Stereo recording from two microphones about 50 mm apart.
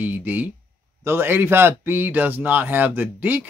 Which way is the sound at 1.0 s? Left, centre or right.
Right.